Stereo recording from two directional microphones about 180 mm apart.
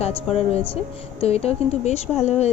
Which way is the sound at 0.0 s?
35° left (ahead or behind).